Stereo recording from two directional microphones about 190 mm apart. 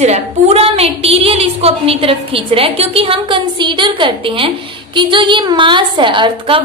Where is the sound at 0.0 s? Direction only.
35° right (ahead or behind).